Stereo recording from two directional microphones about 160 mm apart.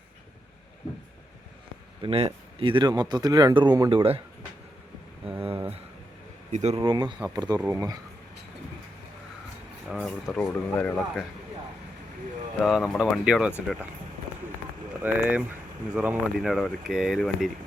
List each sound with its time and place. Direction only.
2.0 s speech: 40° right (ahead or behind)
6.5 s speech: 45° right (ahead or behind)
6.8 s speech: 30° right (ahead or behind)
9.9 s speech: centre (ahead or behind)
12.6 s speech: centre (ahead or behind)
15.0 s speech: 10° right (ahead or behind)